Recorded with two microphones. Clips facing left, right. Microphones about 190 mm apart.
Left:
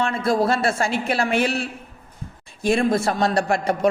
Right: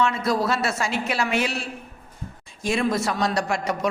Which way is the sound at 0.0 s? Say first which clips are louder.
Left 2 dB; 50° left (ahead or behind).